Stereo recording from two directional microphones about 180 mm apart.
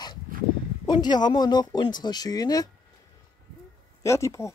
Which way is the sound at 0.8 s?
25° left (ahead or behind).